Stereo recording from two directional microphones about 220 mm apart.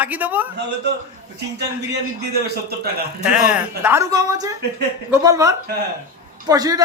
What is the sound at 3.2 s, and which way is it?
Speech, 5° right (ahead or behind).